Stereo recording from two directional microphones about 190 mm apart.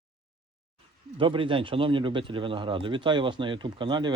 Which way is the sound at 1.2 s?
25° right (ahead or behind).